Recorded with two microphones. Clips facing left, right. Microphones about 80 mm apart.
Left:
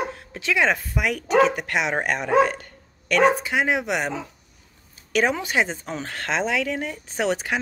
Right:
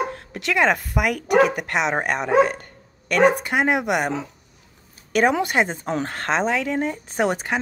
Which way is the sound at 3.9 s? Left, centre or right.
Centre.